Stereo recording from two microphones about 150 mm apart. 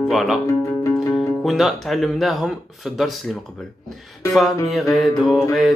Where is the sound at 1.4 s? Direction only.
Centre (ahead or behind).